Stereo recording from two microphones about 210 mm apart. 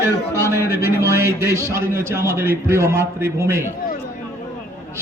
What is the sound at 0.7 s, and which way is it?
A man's voice, 15° right (ahead or behind).